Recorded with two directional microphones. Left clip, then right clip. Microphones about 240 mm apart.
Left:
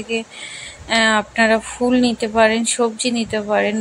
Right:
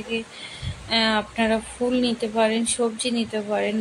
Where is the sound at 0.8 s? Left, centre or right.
Centre.